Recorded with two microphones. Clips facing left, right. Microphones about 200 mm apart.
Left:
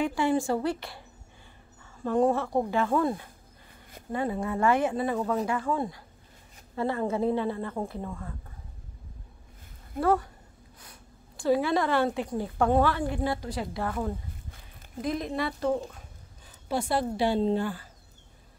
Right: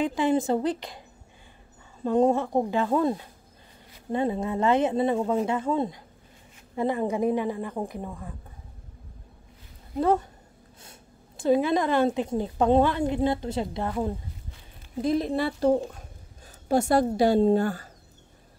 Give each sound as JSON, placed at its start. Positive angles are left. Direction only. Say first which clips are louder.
{"t": 0.0, "sound": "speech", "louder": "right 2 dB", "side_deg": -20}
{"t": 2.0, "sound": "a woman's voice", "louder": "right 3 dB", "side_deg": -20}
{"t": 9.9, "sound": "a woman's voice", "louder": "right 2 dB", "side_deg": -20}
{"t": 15.0, "sound": "a woman's voice", "louder": "right 5 dB", "side_deg": -30}
{"t": 16.6, "sound": "a woman's voice", "louder": "right 6 dB", "side_deg": -45}